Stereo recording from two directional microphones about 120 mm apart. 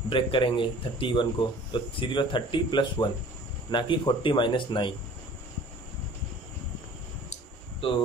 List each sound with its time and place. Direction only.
0.1 s speech: 45° left (ahead or behind)
7.8 s speech: 50° left (ahead or behind)